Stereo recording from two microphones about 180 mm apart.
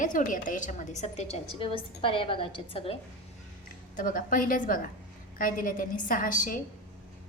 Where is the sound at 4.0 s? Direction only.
50° left (ahead or behind).